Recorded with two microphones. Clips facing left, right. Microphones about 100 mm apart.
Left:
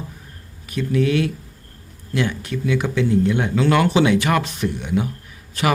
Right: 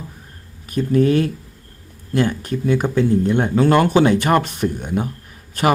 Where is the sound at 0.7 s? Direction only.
40° right (ahead or behind).